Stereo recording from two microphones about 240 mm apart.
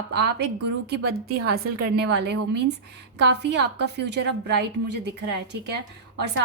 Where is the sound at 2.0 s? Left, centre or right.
Right.